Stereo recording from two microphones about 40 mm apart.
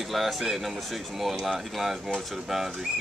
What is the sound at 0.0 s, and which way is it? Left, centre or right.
Speech, centre.